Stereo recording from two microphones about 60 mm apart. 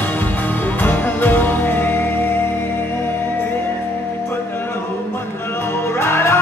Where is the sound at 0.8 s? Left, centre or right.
Left.